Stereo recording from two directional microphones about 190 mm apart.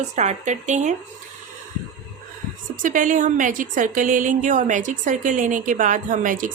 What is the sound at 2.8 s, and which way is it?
A woman's voice, 45° right (ahead or behind).